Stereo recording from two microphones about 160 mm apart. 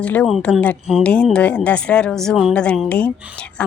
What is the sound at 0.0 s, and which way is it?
Speech, 10° left (ahead or behind).